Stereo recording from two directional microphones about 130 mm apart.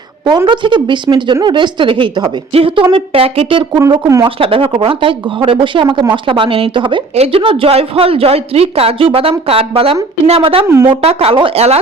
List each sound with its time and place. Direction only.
0.3 s speech: 35° right (ahead or behind)
4.0 s speech: 25° right (ahead or behind)
4.4 s speech: 45° right (ahead or behind)